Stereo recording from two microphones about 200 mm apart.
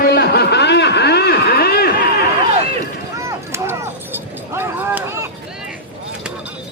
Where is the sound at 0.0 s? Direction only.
55° left (ahead or behind).